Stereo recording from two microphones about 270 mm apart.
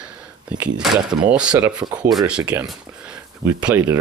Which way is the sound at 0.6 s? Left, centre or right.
Centre.